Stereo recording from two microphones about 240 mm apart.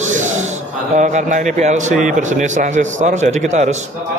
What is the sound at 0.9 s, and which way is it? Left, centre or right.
A man's voice, right.